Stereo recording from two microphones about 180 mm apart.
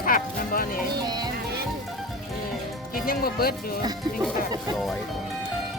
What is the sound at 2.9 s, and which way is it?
Speech, 55° left (ahead or behind).